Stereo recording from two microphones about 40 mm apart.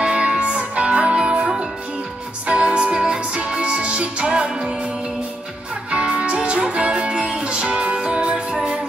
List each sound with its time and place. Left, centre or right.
0.0 s music: right
5.9 s music: right